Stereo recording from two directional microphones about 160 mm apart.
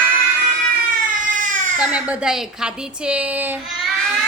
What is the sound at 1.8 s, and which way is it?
Speech, 10° right (ahead or behind).